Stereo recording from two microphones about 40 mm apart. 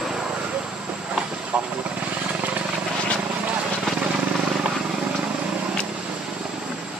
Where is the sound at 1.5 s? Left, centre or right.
Right.